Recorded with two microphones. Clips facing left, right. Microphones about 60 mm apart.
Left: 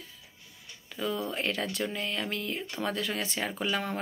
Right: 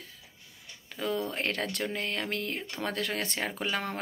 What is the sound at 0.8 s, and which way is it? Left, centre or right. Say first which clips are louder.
Speech: right 1 dB; right.